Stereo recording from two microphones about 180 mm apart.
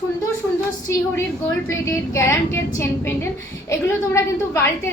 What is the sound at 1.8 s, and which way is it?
A woman's voice, 15° left (ahead or behind).